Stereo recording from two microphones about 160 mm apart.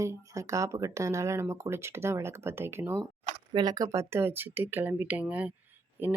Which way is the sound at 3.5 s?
25° right (ahead or behind).